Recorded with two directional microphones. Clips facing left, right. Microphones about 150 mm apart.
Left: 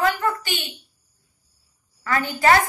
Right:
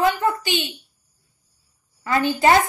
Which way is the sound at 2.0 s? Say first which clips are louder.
Right 3 dB; 20° right (ahead or behind).